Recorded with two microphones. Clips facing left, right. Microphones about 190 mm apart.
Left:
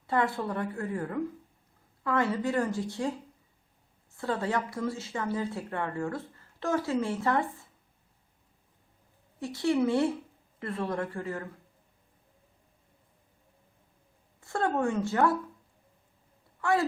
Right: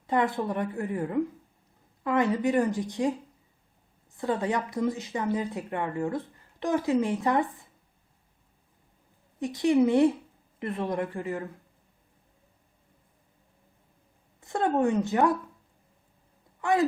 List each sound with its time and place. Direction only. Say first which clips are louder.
0.1 s a woman's voice: right 2 dB; 20° right (ahead or behind)
4.2 s a woman's voice: right 2 dB; 15° right (ahead or behind)
9.4 s a woman's voice: right 4 dB; 15° right (ahead or behind)
14.4 s speech: right 3 dB; 20° right (ahead or behind)
16.6 s speech: right 2 dB; 20° right (ahead or behind)